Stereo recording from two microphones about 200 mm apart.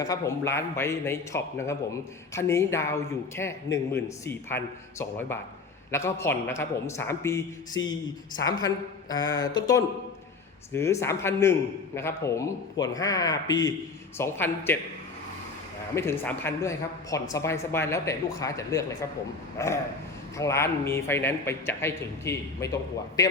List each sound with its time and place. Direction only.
0.0 s a man's voice: 15° left (ahead or behind)
16.0 s a man's voice: 10° left (ahead or behind)